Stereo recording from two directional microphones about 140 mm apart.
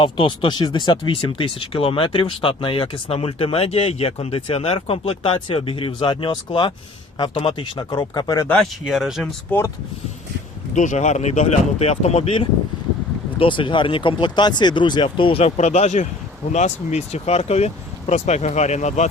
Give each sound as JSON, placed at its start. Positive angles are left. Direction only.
{"t": 0.0, "sound": "speech", "side_deg": 35}
{"t": 8.9, "sound": "speech", "side_deg": 0}
{"t": 9.5, "sound": "speech", "side_deg": 20}
{"t": 10.8, "sound": "speech", "side_deg": 60}